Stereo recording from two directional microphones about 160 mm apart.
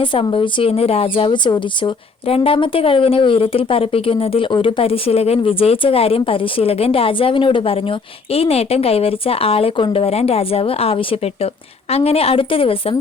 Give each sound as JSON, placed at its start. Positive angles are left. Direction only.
{"t": 0.0, "sound": "a woman's voice", "side_deg": 35}